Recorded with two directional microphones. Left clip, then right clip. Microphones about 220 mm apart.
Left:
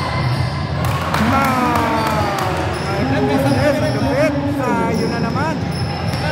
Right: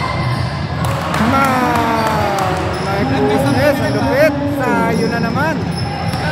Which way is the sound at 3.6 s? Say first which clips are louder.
Right 2 dB; 15° right (ahead or behind).